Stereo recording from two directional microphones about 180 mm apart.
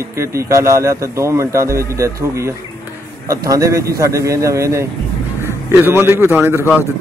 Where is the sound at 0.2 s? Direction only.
15° right (ahead or behind).